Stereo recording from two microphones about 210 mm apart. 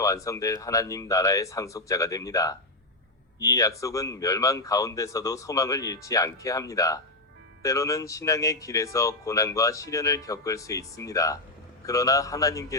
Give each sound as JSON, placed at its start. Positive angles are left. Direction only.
{"t": 0.0, "sound": "speech", "side_deg": 15}